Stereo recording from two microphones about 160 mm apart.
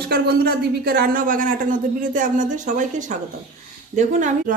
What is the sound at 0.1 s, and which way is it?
A woman's voice, 75° right (ahead or behind).